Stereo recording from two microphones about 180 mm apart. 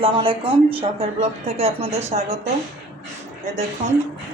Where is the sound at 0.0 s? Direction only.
30° right (ahead or behind).